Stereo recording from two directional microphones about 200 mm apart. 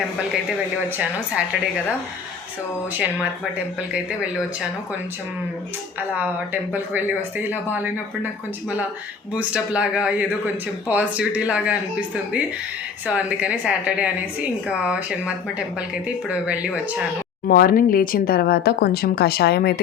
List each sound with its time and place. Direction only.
0.9 s speech: 10° right (ahead or behind)
3.9 s speech: 5° right (ahead or behind)
6.0 s speech: 10° right (ahead or behind)
9.3 s speech: 5° right (ahead or behind)
16.3 s speech: 5° right (ahead or behind)
17.5 s speech: 50° left (ahead or behind)